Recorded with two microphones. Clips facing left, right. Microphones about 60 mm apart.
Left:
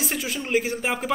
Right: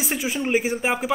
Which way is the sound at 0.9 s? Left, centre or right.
Centre.